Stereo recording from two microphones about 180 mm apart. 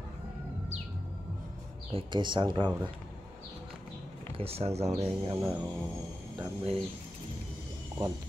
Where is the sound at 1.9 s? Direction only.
30° right (ahead or behind).